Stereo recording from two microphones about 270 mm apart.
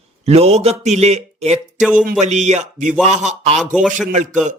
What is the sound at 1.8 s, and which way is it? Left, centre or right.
Speech, centre.